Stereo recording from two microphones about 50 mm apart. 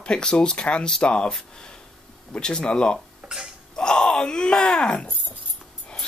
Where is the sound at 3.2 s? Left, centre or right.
Centre.